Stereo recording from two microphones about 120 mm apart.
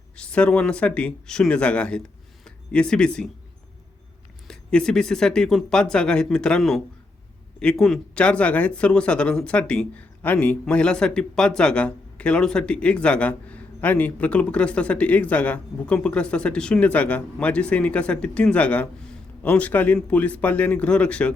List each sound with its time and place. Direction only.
0.2 s speech: 10° left (ahead or behind)
4.4 s speech: 5° left (ahead or behind)